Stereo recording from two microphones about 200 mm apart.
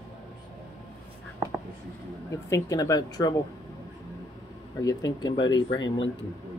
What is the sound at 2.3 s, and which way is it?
Speech, 15° left (ahead or behind).